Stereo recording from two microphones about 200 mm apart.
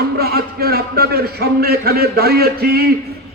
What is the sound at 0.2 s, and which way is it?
A man's voice, 50° right (ahead or behind).